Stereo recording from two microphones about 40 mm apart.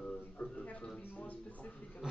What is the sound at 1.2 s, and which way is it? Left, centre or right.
Speech, left.